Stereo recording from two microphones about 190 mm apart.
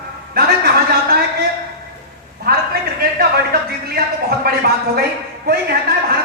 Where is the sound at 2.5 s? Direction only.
55° right (ahead or behind).